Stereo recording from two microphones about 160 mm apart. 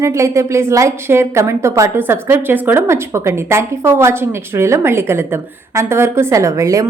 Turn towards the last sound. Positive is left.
turn(degrees=-20)  # may be behind; listen again after turning